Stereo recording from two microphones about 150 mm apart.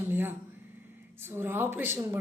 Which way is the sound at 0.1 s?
15° right (ahead or behind).